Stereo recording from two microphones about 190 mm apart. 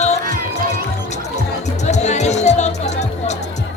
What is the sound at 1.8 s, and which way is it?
Music, 35° left (ahead or behind).